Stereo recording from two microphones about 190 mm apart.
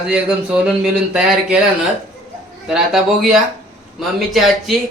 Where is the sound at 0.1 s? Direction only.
5° right (ahead or behind).